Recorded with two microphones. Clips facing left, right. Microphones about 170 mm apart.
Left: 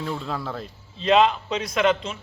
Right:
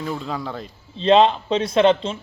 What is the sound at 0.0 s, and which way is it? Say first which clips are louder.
Speech: right 2 dB; centre (ahead or behind).